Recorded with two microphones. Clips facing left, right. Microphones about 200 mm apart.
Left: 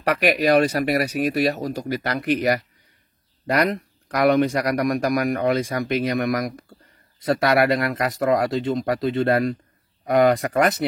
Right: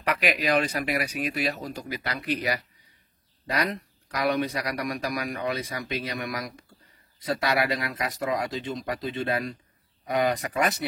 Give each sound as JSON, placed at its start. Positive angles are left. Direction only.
{"t": 0.2, "sound": "speech", "side_deg": 50}